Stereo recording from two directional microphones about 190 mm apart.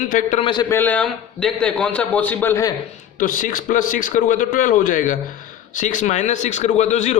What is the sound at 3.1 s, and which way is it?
A man's voice, 45° left (ahead or behind).